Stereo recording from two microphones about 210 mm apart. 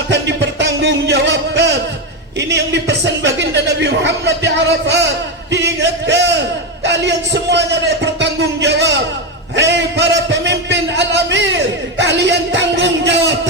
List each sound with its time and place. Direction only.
0.1 s music: 55° right (ahead or behind)
2.5 s speech: 55° right (ahead or behind)
5.5 s a sound: 55° right (ahead or behind)